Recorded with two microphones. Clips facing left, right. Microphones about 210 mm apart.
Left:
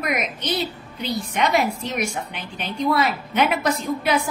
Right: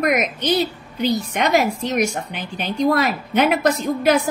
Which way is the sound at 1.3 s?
45° right (ahead or behind).